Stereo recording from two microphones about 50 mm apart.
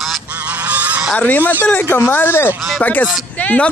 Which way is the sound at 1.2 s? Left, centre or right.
Left.